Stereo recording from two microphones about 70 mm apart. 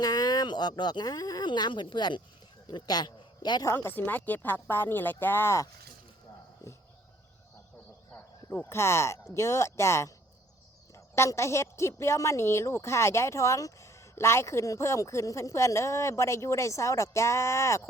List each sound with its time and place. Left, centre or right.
0.0 s a man's voice: left
3.8 s speech: left
8.1 s a sound: left
8.7 s a woman's voice: left